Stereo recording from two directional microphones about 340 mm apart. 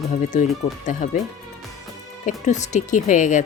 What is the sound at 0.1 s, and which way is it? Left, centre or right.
Speech, left.